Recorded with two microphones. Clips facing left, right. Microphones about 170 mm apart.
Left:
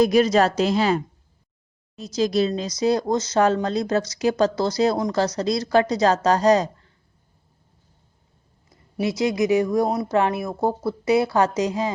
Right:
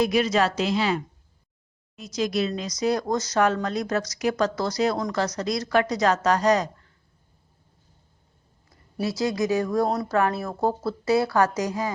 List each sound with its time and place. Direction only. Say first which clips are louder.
0.0 s a woman's voice: left 5 dB; 40° left (ahead or behind)
2.0 s speech: left 4 dB; 30° left (ahead or behind)
9.0 s speech: left 3 dB; 20° left (ahead or behind)